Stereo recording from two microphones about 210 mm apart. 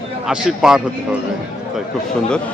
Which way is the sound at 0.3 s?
5° right (ahead or behind).